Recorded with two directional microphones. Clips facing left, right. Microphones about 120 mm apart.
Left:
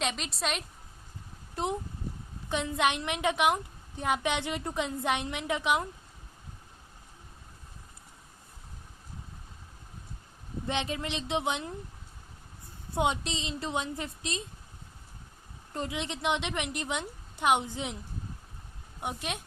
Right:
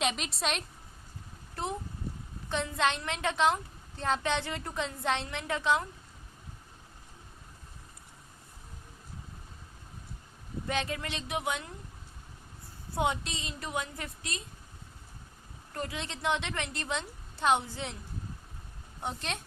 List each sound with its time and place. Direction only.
0.0 s a woman's voice: centre (ahead or behind)
2.5 s a woman's voice: 15° left (ahead or behind)
10.7 s a woman's voice: 20° left (ahead or behind)
12.9 s a woman's voice: 20° left (ahead or behind)
15.7 s a woman's voice: 20° left (ahead or behind)
18.9 s a woman's voice: 10° left (ahead or behind)